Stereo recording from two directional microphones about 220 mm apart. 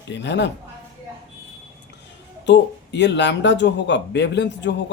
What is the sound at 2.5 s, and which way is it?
Speech, 50° left (ahead or behind).